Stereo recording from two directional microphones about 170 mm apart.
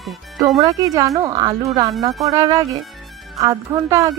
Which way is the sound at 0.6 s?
20° right (ahead or behind).